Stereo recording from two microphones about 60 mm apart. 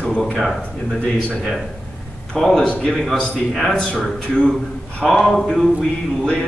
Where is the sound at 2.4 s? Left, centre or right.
Centre.